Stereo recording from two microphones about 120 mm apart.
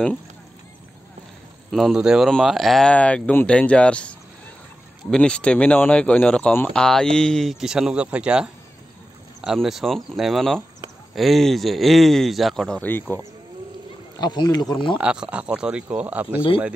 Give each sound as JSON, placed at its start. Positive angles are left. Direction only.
{"t": 1.7, "sound": "speech", "side_deg": 0}
{"t": 5.1, "sound": "speech", "side_deg": 10}
{"t": 14.2, "sound": "speech", "side_deg": 35}
{"t": 15.0, "sound": "speech", "side_deg": -10}